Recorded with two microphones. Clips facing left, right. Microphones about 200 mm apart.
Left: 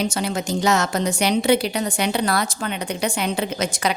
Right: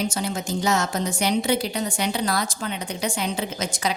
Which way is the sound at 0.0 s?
75° left (ahead or behind).